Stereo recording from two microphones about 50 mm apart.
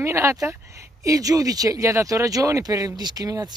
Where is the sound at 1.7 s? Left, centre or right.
Right.